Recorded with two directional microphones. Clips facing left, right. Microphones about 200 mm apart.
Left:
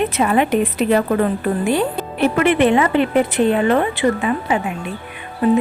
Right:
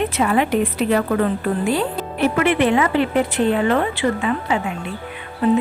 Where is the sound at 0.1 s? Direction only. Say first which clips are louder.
Left 2 dB; 20° left (ahead or behind).